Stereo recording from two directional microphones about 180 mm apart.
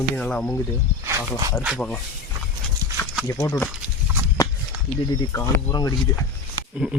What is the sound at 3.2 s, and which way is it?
Speech, 15° left (ahead or behind).